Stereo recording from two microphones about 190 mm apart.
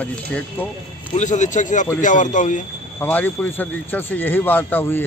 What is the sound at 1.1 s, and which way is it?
Speech, 40° left (ahead or behind).